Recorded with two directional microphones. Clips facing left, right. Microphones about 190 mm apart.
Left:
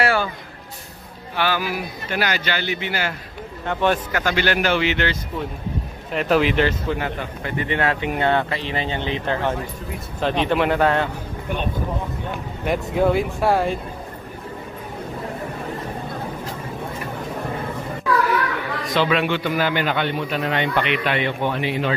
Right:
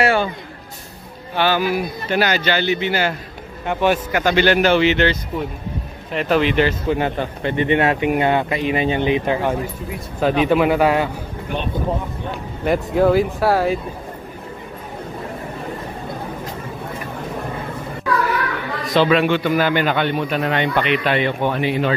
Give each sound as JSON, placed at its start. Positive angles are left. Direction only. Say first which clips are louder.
{"t": 0.0, "sound": "a sound", "louder": "right 3 dB", "side_deg": -20}
{"t": 1.3, "sound": "a man's voice", "louder": "right 5 dB", "side_deg": -25}
{"t": 3.6, "sound": "speech", "louder": "right 2 dB", "side_deg": -10}
{"t": 4.2, "sound": "a man's voice", "louder": "right 5 dB", "side_deg": -20}
{"t": 6.1, "sound": "speech", "louder": "right 1 dB", "side_deg": 0}
{"t": 7.2, "sound": "speech", "louder": "right 6 dB", "side_deg": -25}
{"t": 12.6, "sound": "speech", "louder": "right 4 dB", "side_deg": 0}
{"t": 18.9, "sound": "a man's voice", "louder": "right 5 dB", "side_deg": -40}
{"t": 20.9, "sound": "a man's voice", "louder": "right 3 dB", "side_deg": -35}